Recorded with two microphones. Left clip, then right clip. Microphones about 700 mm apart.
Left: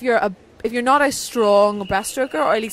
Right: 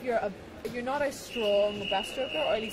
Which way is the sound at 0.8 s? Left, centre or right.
Left.